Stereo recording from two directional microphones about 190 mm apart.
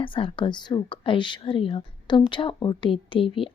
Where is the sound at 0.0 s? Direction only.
25° left (ahead or behind).